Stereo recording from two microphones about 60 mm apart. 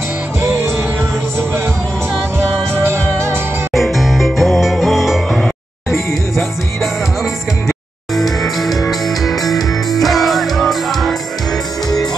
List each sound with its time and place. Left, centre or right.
0.4 s music: right
2.3 s music: right
3.7 s music: centre
8.1 s music: centre